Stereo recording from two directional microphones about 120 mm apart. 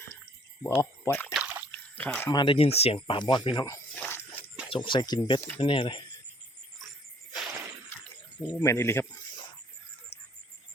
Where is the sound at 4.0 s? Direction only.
15° left (ahead or behind).